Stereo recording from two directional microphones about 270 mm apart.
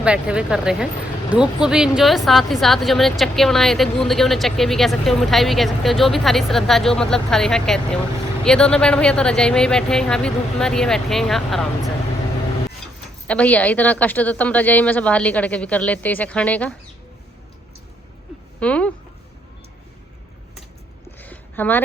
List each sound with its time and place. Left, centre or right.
0.0 s speech: centre
13.2 s speech: centre
18.6 s speech: centre
21.2 s a sound: centre